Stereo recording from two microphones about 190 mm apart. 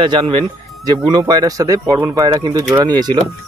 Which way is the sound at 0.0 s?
25° right (ahead or behind).